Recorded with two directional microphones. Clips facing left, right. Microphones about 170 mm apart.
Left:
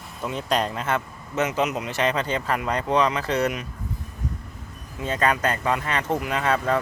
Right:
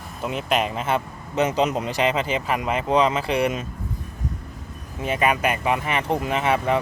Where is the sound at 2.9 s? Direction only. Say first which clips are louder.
Right 2 dB; 25° right (ahead or behind).